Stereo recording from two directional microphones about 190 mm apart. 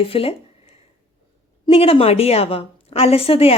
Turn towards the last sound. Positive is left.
turn(degrees=30)  # may be behind; listen again after turning